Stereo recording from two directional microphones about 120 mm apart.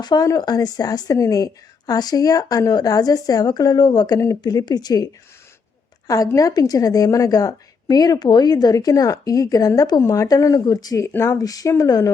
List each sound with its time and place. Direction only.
0.0 s a woman's voice: 35° left (ahead or behind)
6.1 s a woman's voice: 30° left (ahead or behind)